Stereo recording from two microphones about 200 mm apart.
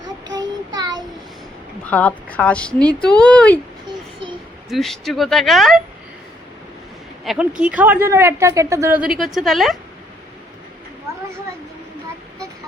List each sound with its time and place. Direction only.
0.3 s child singing: 20° right (ahead or behind)
1.9 s speech: 5° left (ahead or behind)
4.7 s speech: centre (ahead or behind)
7.3 s a woman's voice: centre (ahead or behind)